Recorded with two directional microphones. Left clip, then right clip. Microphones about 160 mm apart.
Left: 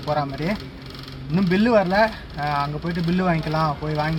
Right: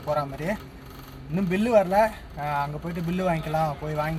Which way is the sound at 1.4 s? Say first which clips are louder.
Left 3 dB; centre (ahead or behind).